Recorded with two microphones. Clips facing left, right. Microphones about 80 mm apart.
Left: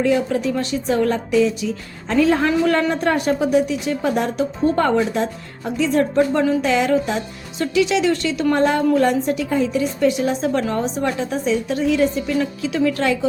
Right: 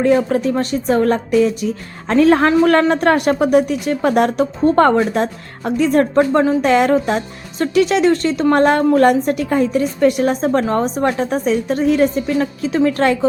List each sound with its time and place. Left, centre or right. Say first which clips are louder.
0.0 s a woman's voice: right 4 dB; right
6.6 s a woman's voice: right 4 dB; right
8.5 s a woman's voice: right 4 dB; right